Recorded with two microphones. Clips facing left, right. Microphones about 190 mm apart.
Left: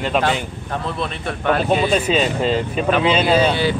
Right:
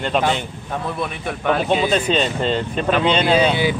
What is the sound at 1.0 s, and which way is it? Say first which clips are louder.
Speech: even; 15° right (ahead or behind).